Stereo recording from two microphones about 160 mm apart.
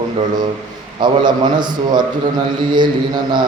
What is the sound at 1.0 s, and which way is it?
A man's voice, 30° right (ahead or behind).